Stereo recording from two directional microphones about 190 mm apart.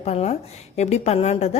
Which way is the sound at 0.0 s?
35° left (ahead or behind).